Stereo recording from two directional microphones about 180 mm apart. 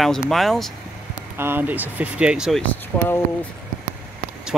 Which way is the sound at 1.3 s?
10° right (ahead or behind).